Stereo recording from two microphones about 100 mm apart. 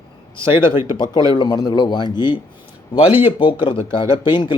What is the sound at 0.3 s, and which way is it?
Speech, 60° left (ahead or behind).